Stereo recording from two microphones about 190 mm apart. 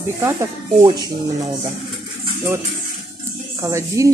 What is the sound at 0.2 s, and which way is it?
Speech, 15° right (ahead or behind).